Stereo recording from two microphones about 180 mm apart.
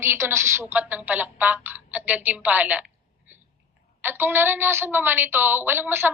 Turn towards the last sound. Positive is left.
turn(degrees=-10)  # may be behind; listen again after turning